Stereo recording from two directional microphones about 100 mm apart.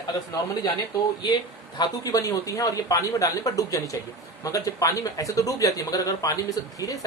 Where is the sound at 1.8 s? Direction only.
35° left (ahead or behind).